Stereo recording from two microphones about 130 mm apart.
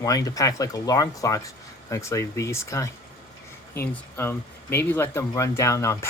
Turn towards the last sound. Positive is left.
turn(degrees=25)  # may be behind; listen again after turning